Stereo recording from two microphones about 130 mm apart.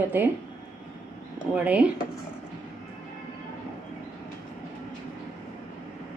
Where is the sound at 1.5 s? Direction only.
10° right (ahead or behind).